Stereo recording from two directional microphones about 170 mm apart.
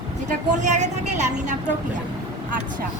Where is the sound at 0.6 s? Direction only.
45° right (ahead or behind).